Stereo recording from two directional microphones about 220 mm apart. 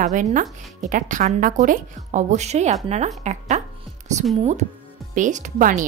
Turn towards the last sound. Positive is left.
turn(degrees=-35)  # may be behind; listen again after turning